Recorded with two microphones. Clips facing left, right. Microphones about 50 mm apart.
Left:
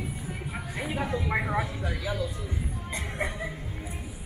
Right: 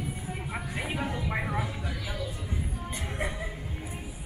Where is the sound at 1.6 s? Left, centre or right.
Left.